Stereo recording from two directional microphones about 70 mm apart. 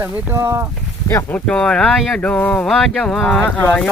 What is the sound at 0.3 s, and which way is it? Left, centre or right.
Speech, right.